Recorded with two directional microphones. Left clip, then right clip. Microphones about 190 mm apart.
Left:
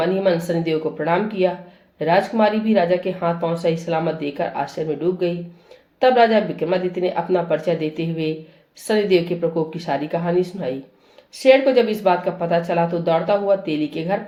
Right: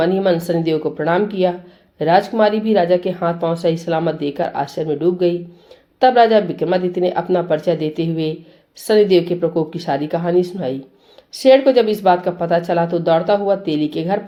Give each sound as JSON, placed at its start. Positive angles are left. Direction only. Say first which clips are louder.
{"t": 0.0, "sound": "a woman's voice", "louder": "right 3 dB", "side_deg": -50}